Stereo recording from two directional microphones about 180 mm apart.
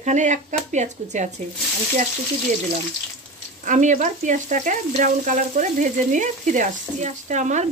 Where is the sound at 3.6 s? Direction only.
45° right (ahead or behind).